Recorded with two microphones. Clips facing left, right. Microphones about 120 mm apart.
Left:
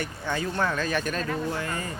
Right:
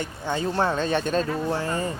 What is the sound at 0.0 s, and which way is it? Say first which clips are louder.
Speech: right 3 dB; 20° right (ahead or behind).